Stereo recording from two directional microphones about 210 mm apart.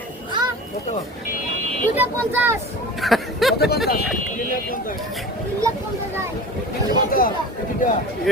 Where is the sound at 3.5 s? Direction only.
50° left (ahead or behind).